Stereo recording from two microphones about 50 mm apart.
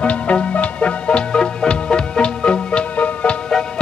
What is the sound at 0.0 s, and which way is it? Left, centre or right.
Music, left.